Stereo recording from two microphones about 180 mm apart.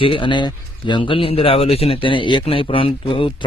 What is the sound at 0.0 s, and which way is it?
Speech, 30° left (ahead or behind).